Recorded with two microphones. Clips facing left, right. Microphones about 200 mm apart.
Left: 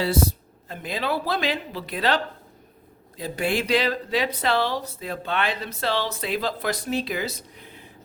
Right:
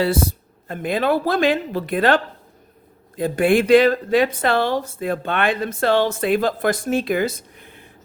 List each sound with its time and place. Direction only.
0.7 s speech: 55° right (ahead or behind)